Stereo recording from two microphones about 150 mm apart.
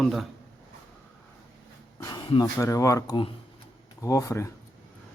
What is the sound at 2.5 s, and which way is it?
Speech, 20° left (ahead or behind).